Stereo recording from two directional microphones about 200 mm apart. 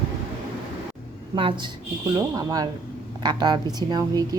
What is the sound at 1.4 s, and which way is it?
A woman's voice, 25° right (ahead or behind).